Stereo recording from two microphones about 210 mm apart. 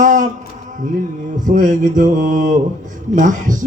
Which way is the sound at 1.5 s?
40° right (ahead or behind).